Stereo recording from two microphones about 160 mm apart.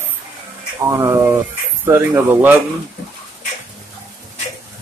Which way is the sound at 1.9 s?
15° right (ahead or behind).